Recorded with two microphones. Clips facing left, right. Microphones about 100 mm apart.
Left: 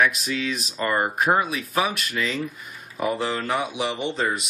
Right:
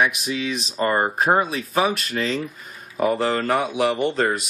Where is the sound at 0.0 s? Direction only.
15° right (ahead or behind).